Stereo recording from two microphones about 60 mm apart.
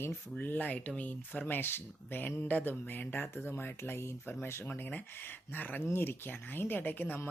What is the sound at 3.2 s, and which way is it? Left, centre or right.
Speech, left.